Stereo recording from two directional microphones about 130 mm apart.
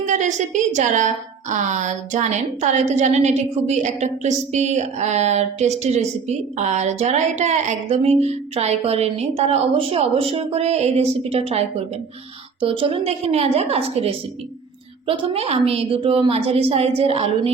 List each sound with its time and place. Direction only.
0.0 s a woman's voice: 70° right (ahead or behind); by 17.5 s 50° right (ahead or behind)